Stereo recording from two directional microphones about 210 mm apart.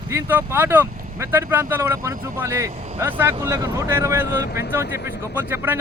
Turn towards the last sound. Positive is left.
turn(degrees=-10)  # may be behind; listen again after turning